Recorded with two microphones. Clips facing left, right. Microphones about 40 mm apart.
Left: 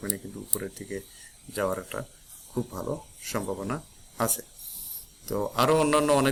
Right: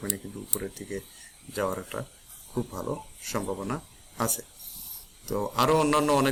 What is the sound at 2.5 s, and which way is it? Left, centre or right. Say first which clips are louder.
Speech: even; right.